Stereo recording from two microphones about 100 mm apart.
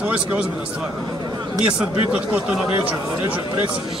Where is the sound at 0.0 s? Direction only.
15° right (ahead or behind).